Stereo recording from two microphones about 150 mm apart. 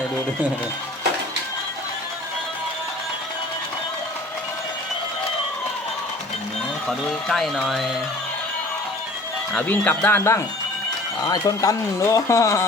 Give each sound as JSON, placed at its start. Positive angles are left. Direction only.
{"t": 6.8, "sound": "speech", "side_deg": 0}
{"t": 9.6, "sound": "speech", "side_deg": 10}